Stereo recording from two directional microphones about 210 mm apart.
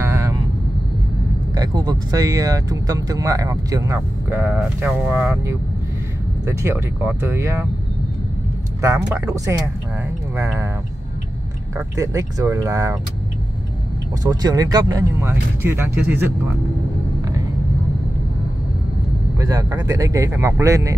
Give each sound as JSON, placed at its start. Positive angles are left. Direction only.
{"t": 0.0, "sound": "vehicle", "side_deg": -15}
{"t": 1.5, "sound": "speech", "side_deg": -20}
{"t": 9.2, "sound": "speech", "side_deg": -15}
{"t": 11.7, "sound": "speech", "side_deg": -15}
{"t": 14.2, "sound": "speech", "side_deg": -20}
{"t": 19.3, "sound": "speech", "side_deg": -15}